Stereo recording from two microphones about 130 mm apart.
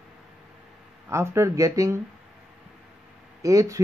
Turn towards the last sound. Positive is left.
turn(degrees=-25)  # may be behind; listen again after turning